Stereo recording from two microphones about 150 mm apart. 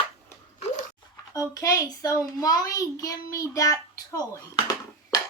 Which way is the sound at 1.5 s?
25° left (ahead or behind).